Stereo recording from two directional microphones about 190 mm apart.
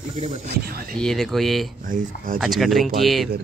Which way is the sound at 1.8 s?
45° right (ahead or behind).